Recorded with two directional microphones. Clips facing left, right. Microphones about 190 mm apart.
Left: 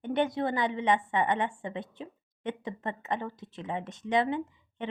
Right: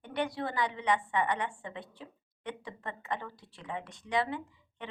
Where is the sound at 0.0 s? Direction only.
20° left (ahead or behind).